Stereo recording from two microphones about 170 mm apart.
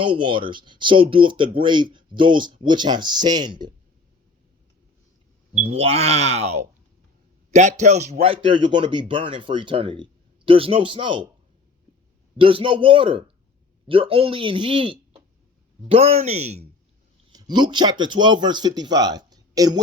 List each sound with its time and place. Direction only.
0.0 s speech: 30° right (ahead or behind)
5.5 s speech: 35° right (ahead or behind)
8.2 s speech: 30° right (ahead or behind)
12.4 s speech: 30° right (ahead or behind)
17.3 s speech: 25° right (ahead or behind)